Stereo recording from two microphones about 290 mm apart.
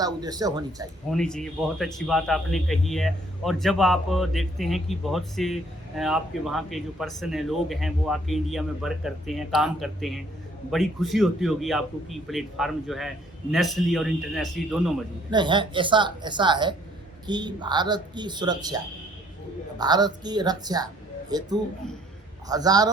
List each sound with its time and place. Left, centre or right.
0.0 s speech: centre
1.1 s speech: centre
15.3 s speech: centre
19.8 s speech: centre